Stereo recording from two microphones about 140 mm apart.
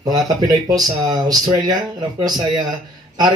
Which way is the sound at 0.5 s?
25° right (ahead or behind).